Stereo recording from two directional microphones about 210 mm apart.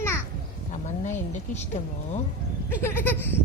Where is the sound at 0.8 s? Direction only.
35° left (ahead or behind).